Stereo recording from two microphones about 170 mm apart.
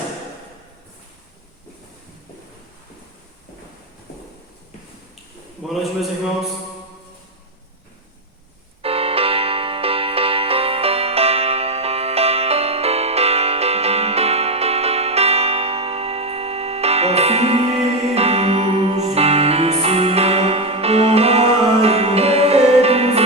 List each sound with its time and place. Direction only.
5.6 s a man's voice: centre (ahead or behind)
8.8 s music: 35° right (ahead or behind)